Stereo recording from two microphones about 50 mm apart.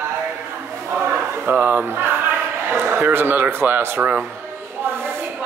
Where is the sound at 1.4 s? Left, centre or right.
Right.